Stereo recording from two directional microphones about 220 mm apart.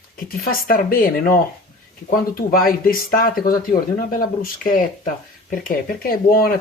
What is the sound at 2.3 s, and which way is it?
Speech, 40° left (ahead or behind).